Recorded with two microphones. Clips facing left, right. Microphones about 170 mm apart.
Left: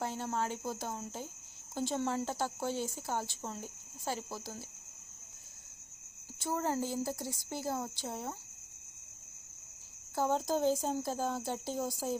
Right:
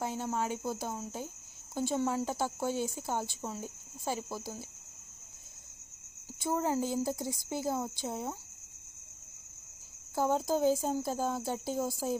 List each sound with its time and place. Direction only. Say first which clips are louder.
0.0 s cricket: right 2 dB; 10° right (ahead or behind)
0.7 s speech: right 2 dB; 10° right (ahead or behind)
6.4 s speech: right 3 dB; 15° right (ahead or behind)
10.2 s speech: right 2 dB; 10° right (ahead or behind)